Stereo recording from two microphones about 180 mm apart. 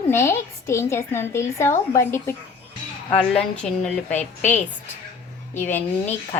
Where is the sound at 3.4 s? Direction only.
5° left (ahead or behind).